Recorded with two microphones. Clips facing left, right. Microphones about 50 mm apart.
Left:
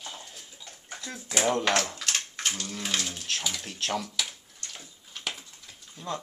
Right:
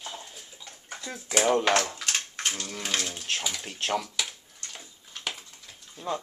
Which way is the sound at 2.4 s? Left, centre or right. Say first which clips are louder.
Even; centre.